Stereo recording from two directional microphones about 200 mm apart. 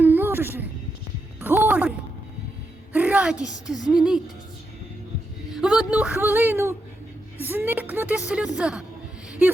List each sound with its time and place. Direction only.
0.0 s a sound: 10° right (ahead or behind)
1.4 s music: 10° right (ahead or behind)
2.9 s a sound: 10° right (ahead or behind)
3.3 s a woman's voice: 20° left (ahead or behind)
3.7 s speech: 5° right (ahead or behind)
5.5 s speech: centre (ahead or behind)